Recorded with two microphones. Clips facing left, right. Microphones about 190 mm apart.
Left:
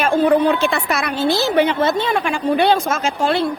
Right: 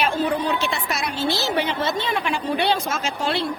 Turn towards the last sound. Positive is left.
turn(degrees=50)  # may be behind; listen again after turning